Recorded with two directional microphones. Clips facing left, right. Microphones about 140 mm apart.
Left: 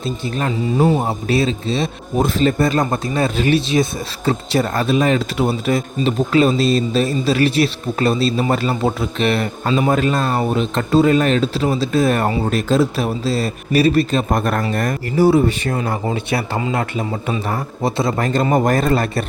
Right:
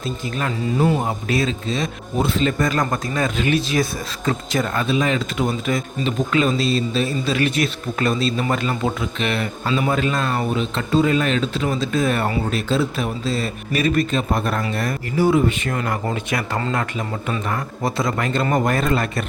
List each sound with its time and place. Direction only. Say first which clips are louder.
0.0 s speech: left 3 dB; 35° left (ahead or behind)
2.1 s speech: left 4 dB; 40° left (ahead or behind)
17.4 s speech: left 3 dB; 30° left (ahead or behind)